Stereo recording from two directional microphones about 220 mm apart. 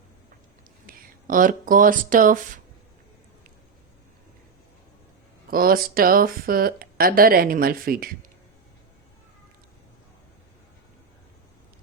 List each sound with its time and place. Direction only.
0.9 s speech: 40° right (ahead or behind)
5.5 s speech: 40° right (ahead or behind)